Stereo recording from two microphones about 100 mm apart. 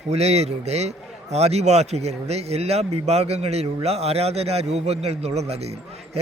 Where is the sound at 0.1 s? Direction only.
90° right.